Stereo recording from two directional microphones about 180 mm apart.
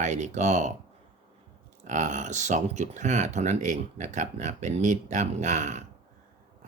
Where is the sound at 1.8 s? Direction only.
40° right (ahead or behind).